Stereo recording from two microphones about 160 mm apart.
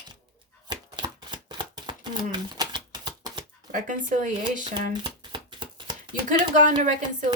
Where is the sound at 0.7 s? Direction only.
30° right (ahead or behind).